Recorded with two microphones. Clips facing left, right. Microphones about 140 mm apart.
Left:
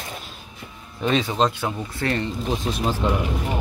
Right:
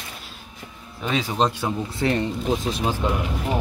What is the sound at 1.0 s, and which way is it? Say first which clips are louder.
Speech: left 2 dB; 10° right (ahead or behind).